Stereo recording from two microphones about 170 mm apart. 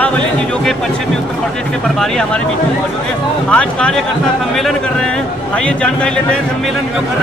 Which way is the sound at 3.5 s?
5° left (ahead or behind).